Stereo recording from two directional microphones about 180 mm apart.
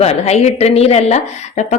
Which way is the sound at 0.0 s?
35° left (ahead or behind).